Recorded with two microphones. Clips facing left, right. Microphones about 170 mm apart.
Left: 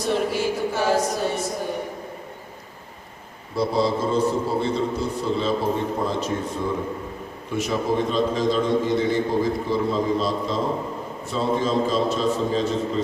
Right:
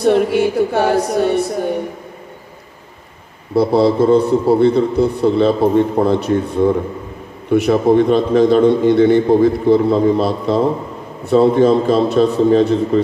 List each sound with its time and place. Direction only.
0.0 s a man's voice: 60° right (ahead or behind)
3.5 s a man's voice: 65° right (ahead or behind)